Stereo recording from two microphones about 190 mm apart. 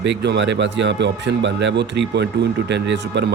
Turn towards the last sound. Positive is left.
turn(degrees=-65)  # may be behind; listen again after turning